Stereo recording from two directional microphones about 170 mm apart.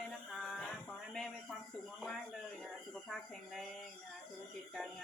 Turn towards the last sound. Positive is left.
turn(degrees=0)  # may be behind; listen again after turning